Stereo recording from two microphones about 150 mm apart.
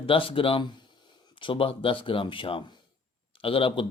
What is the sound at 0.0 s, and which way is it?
Speech, 35° left (ahead or behind).